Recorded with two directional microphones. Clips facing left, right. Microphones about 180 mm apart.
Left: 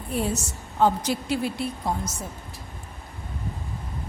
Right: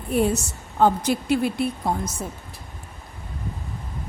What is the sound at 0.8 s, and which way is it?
Speech, 55° right (ahead or behind).